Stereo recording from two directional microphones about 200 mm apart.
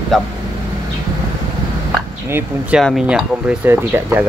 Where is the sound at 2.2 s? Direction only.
10° right (ahead or behind).